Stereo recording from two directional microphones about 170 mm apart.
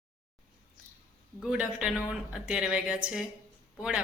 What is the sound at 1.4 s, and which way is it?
A woman's voice, 5° right (ahead or behind).